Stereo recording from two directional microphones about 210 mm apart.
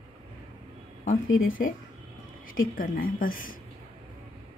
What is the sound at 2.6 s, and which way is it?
Speech, 40° left (ahead or behind).